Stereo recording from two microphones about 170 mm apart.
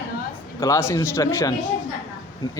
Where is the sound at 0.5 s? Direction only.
20° left (ahead or behind).